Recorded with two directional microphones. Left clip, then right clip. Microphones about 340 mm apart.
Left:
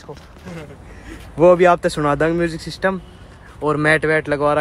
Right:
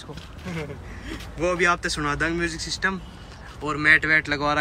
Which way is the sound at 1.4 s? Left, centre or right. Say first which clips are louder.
Left 10 dB; centre.